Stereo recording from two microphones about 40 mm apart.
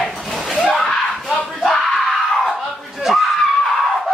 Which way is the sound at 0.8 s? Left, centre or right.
Left.